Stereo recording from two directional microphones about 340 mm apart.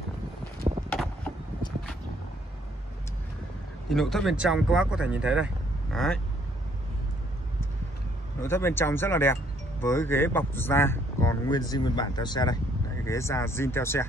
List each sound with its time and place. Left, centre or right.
0.7 s a sound: centre
3.9 s speech: centre
8.4 s speech: centre